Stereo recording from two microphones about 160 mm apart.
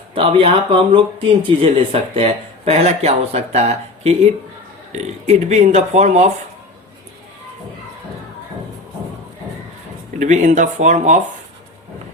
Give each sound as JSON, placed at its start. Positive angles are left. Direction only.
{"t": 0.1, "sound": "speech", "side_deg": -35}
{"t": 10.2, "sound": "speech", "side_deg": -50}